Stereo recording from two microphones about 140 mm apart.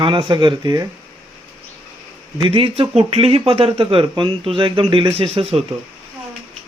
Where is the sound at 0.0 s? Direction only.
35° right (ahead or behind).